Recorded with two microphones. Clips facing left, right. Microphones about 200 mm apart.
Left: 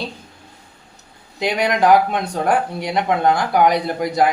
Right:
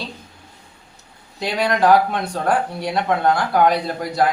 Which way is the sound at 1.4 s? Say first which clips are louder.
Left 1 dB; 15° left (ahead or behind).